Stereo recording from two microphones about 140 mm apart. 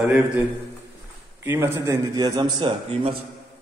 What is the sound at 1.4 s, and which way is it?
A man's voice, 20° right (ahead or behind).